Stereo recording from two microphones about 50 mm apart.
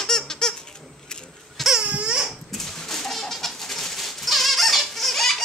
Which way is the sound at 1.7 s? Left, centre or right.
Right.